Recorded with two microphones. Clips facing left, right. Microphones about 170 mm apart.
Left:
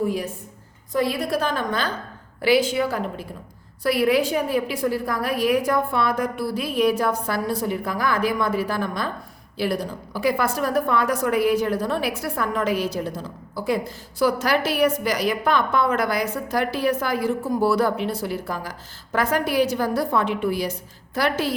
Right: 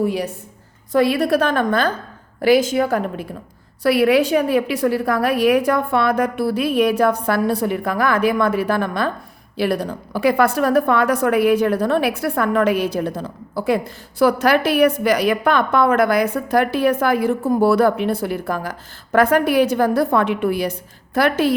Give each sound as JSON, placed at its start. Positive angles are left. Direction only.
{"t": 0.0, "sound": "a woman's voice", "side_deg": -75}
{"t": 2.4, "sound": "a woman's voice", "side_deg": -45}
{"t": 3.8, "sound": "a woman's voice", "side_deg": -70}